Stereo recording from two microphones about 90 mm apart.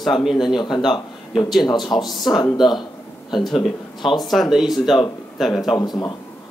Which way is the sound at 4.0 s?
60° left (ahead or behind).